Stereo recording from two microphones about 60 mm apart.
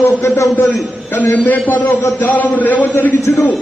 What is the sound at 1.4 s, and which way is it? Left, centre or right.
A man's voice, left.